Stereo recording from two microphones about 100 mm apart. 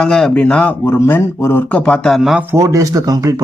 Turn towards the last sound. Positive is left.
turn(degrees=-40)  # may be behind; listen again after turning